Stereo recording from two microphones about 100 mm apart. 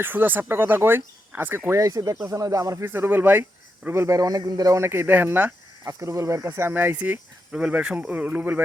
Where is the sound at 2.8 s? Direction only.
20° right (ahead or behind).